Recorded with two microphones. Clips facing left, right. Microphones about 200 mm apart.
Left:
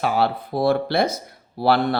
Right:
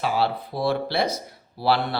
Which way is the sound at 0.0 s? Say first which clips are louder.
Left 3 dB; 50° left (ahead or behind).